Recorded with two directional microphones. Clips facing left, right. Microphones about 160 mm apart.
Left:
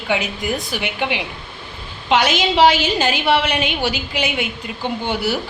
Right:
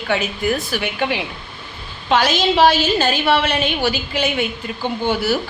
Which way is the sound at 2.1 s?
15° left (ahead or behind).